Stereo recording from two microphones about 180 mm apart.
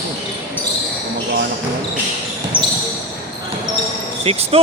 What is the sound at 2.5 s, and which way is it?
Basketball bounce, 10° right (ahead or behind).